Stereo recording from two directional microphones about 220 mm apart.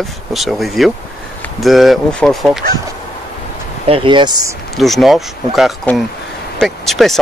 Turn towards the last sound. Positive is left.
turn(degrees=0)  # may be behind; listen again after turning